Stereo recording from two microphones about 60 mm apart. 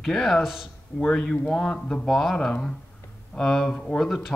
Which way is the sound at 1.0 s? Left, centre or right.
Centre.